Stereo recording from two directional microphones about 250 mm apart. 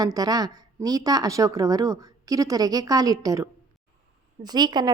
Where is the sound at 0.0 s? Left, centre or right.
Centre.